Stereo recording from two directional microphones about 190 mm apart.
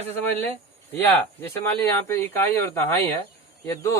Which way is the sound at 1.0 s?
10° left (ahead or behind).